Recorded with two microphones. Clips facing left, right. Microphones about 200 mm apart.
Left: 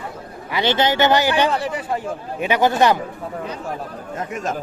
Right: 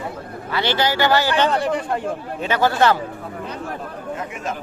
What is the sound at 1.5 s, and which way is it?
Speech, centre (ahead or behind).